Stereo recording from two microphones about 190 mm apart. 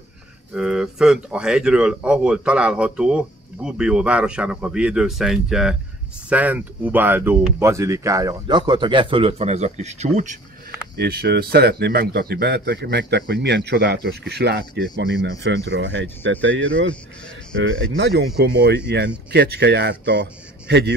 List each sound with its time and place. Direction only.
0.6 s speech: 5° right (ahead or behind); by 10.3 s 40° right (ahead or behind)
11.0 s a man's voice: 55° right (ahead or behind); by 16.6 s 75° right (ahead or behind)
17.9 s a man's voice: 65° right (ahead or behind)